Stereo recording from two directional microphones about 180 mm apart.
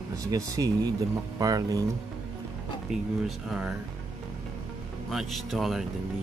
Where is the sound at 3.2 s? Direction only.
5° right (ahead or behind).